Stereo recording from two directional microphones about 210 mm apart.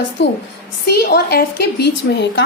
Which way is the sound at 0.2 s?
55° left (ahead or behind).